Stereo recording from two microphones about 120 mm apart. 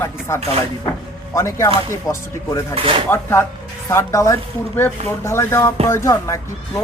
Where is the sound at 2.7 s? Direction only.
45° right (ahead or behind).